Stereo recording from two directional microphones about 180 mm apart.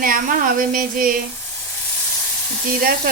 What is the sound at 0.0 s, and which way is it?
Speech, 50° right (ahead or behind).